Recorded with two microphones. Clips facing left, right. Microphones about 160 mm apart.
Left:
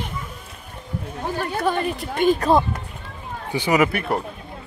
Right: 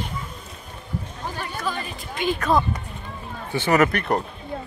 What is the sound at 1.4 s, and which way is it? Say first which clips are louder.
Speech: left 7 dB; 60° left (ahead or behind).